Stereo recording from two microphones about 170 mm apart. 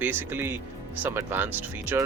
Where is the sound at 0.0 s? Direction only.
10° right (ahead or behind).